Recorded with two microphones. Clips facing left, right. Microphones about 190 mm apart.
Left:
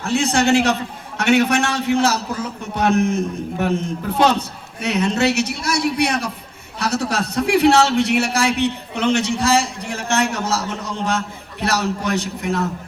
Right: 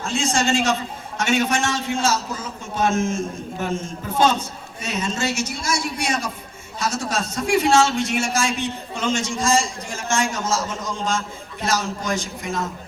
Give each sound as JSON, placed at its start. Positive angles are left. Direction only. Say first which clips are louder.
{"t": 0.0, "sound": "a man's voice", "louder": "left 4 dB", "side_deg": 65}